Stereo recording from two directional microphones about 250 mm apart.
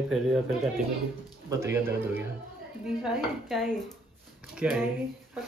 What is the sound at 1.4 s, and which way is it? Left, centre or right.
Speech, centre.